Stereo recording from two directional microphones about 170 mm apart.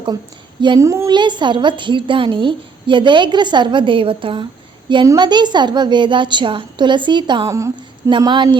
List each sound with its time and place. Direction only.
0.6 s a woman's voice: 20° right (ahead or behind)